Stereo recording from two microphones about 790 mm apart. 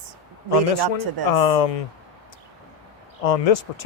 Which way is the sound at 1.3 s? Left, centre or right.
Left.